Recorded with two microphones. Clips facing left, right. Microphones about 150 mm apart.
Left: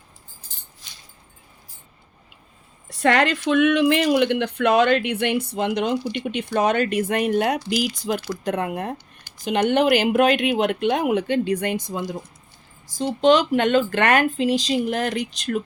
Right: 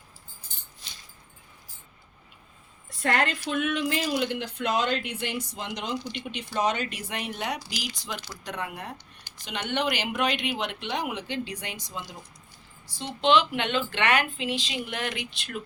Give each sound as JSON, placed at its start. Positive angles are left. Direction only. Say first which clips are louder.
{"t": 2.9, "sound": "a woman's voice", "louder": "left 7 dB", "side_deg": 85}
{"t": 13.1, "sound": "speech", "louder": "left 6 dB", "side_deg": 40}